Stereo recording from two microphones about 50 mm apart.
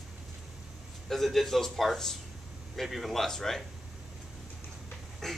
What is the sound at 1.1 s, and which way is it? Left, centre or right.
Speech, centre.